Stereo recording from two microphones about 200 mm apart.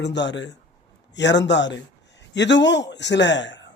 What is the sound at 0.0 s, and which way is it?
A man's voice, 60° left (ahead or behind).